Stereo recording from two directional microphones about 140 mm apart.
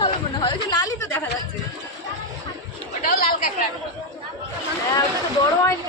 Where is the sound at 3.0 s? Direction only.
90° left.